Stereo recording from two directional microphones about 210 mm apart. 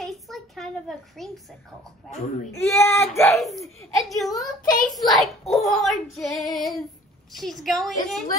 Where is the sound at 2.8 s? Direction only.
15° left (ahead or behind).